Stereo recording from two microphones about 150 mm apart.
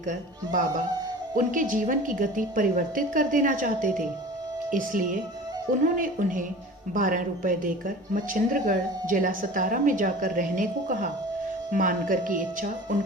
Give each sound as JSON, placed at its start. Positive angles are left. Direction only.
{"t": 0.0, "sound": "speech", "side_deg": -60}